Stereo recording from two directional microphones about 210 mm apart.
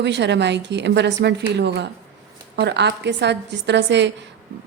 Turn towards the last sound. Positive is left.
turn(degrees=-55)  # may be behind; listen again after turning